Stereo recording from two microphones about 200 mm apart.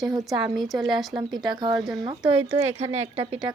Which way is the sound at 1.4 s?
20° right (ahead or behind).